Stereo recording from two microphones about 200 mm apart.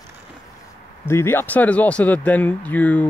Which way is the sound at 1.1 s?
10° left (ahead or behind).